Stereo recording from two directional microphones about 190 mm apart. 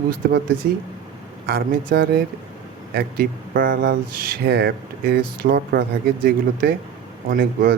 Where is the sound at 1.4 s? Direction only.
50° right (ahead or behind).